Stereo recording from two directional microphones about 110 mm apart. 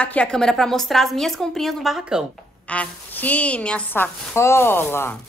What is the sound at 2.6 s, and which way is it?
A woman's voice, 10° left (ahead or behind).